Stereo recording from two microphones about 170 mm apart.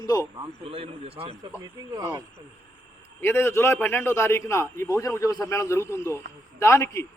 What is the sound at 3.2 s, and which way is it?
A man's voice, 15° left (ahead or behind).